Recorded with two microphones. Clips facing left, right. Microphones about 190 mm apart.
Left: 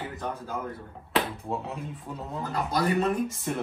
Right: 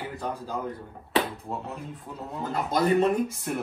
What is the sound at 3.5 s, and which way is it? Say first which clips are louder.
Speech: even; 5° right (ahead or behind).